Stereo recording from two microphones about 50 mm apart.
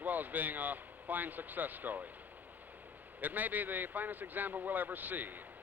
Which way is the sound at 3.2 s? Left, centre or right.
Right.